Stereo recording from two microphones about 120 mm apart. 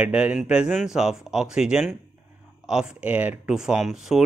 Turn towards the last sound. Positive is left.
turn(degrees=-5)  # may be behind; listen again after turning